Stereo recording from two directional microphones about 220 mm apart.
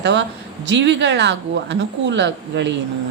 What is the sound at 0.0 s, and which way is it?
A woman's voice, 50° right (ahead or behind).